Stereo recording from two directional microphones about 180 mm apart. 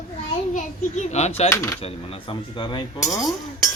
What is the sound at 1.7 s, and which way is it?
Speech, 30° left (ahead or behind).